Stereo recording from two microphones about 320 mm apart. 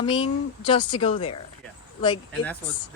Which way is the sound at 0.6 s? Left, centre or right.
Centre.